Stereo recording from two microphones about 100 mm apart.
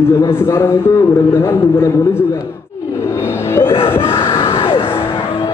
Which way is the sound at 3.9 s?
25° left (ahead or behind).